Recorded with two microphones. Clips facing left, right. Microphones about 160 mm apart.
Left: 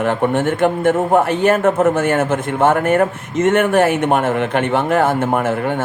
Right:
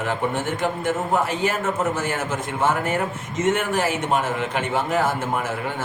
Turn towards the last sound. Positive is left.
turn(degrees=55)  # may be behind; listen again after turning